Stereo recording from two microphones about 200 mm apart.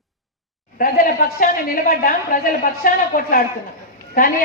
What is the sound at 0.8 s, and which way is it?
A woman's voice, 45° left (ahead or behind).